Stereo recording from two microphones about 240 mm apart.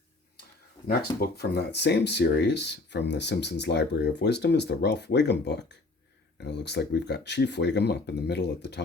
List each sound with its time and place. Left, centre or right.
0.9 s speech: left